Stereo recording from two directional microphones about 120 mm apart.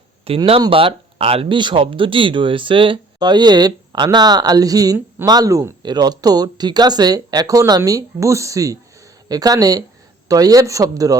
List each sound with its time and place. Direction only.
0.3 s speech: 55° right (ahead or behind); by 11.2 s 30° right (ahead or behind)